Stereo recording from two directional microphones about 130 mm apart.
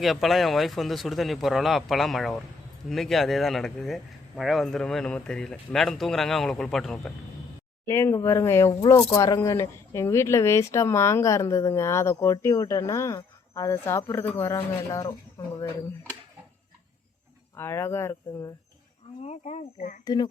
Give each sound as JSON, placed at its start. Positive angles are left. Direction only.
{"t": 0.0, "sound": "speech", "side_deg": 0}
{"t": 7.9, "sound": "speech", "side_deg": 20}
{"t": 17.6, "sound": "speech", "side_deg": 20}
{"t": 19.2, "sound": "speech", "side_deg": 60}
{"t": 20.1, "sound": "speech", "side_deg": 30}